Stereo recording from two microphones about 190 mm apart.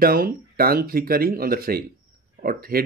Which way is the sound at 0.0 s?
50° right (ahead or behind).